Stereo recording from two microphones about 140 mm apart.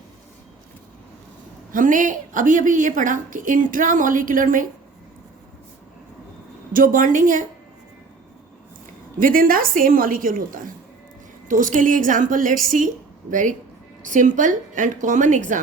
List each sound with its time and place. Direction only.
1.7 s a woman's voice: 70° right (ahead or behind)
6.7 s a woman's voice: 75° right (ahead or behind)
9.1 s a woman's voice: 90° right
11.4 s a woman's voice: 70° right (ahead or behind)
13.3 s speech: 65° right (ahead or behind)